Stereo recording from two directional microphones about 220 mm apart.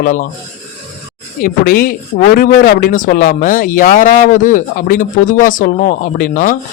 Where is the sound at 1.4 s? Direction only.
40° left (ahead or behind).